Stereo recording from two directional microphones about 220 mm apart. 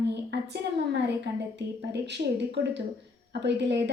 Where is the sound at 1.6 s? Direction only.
50° right (ahead or behind).